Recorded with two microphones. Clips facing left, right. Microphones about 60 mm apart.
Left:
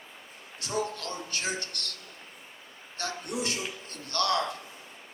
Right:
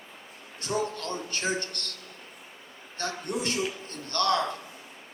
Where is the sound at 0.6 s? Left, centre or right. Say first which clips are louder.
Right 2 dB; right.